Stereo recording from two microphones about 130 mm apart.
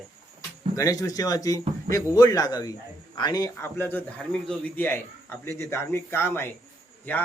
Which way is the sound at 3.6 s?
15° left (ahead or behind).